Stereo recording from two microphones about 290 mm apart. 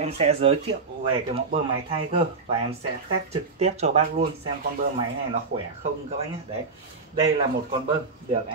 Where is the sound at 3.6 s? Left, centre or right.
Right.